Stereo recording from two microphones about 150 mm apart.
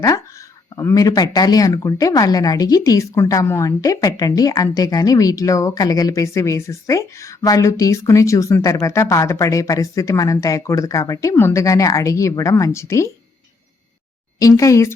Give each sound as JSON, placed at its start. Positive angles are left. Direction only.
{"t": 0.8, "sound": "speech", "side_deg": 20}
{"t": 14.3, "sound": "speech", "side_deg": 20}